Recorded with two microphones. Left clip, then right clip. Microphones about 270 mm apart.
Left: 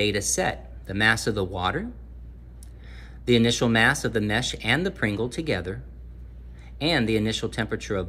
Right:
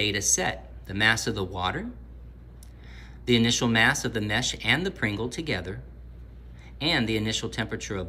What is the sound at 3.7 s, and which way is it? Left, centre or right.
Speech, centre.